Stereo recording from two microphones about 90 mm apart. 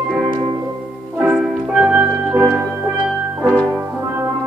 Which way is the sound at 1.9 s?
15° right (ahead or behind).